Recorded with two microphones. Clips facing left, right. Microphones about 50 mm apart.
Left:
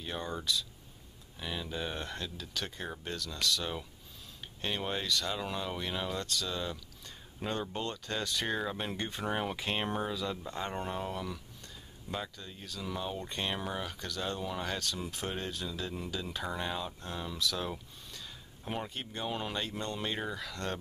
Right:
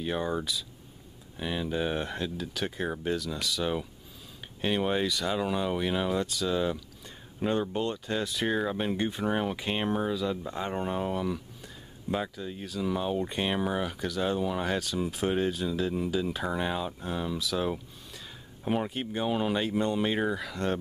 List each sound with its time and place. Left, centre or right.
0.0 s speech: centre